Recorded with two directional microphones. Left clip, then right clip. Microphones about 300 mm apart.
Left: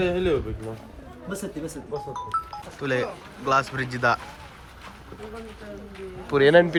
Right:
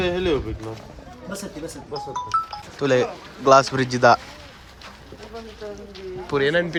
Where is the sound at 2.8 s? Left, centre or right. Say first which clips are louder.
Right 7 dB; centre.